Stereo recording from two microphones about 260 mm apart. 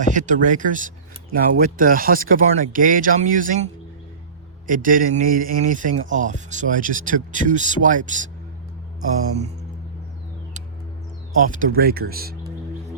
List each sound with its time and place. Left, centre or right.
0.0 s speech: right
11.3 s speech: right